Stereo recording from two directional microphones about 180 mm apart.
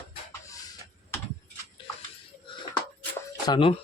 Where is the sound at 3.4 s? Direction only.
25° left (ahead or behind).